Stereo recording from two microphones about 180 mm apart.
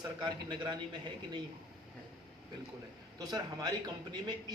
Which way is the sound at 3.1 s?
20° right (ahead or behind).